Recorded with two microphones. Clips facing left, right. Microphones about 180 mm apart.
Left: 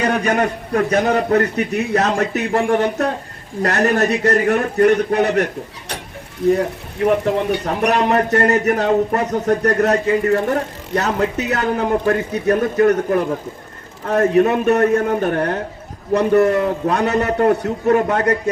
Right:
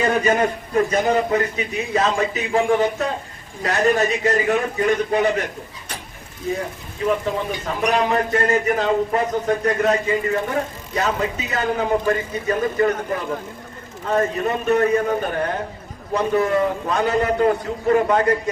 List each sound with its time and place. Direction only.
0.0 s a man's voice: 70° left (ahead or behind)
6.5 s a man's voice: 65° left (ahead or behind)